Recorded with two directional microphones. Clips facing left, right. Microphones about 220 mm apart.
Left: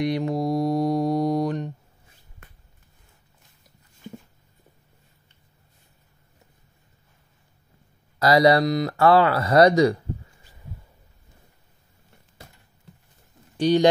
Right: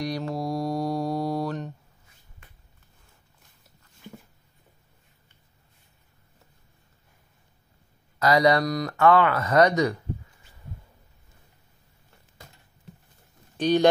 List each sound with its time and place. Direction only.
0.0 s mantra: 20° left (ahead or behind)
8.2 s speech: 35° left (ahead or behind)
13.6 s speech: 15° left (ahead or behind)